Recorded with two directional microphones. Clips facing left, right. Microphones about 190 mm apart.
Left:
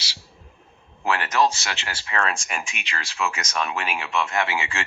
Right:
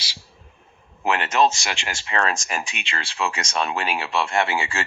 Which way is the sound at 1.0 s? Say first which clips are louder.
Right 2 dB; 25° right (ahead or behind).